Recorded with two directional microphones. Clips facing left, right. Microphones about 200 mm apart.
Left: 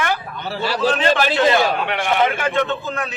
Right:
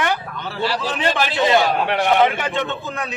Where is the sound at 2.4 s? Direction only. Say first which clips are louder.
Left 3 dB; 20° right (ahead or behind).